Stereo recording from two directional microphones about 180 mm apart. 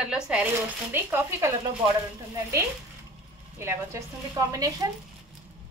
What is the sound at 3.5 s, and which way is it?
Speech, 15° right (ahead or behind).